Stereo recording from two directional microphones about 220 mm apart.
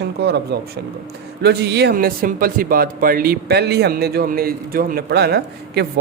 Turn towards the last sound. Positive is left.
turn(degrees=-50)  # may be behind; listen again after turning